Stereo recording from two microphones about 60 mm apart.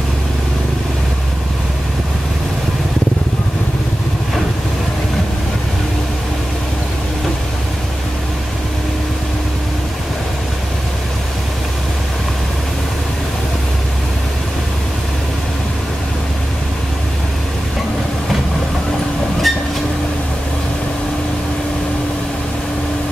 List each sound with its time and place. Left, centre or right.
19.5 s train: centre